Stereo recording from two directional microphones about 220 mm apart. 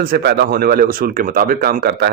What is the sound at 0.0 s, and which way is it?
Speech, 45° right (ahead or behind).